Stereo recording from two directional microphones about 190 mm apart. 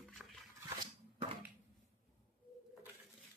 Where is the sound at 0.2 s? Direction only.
5° right (ahead or behind).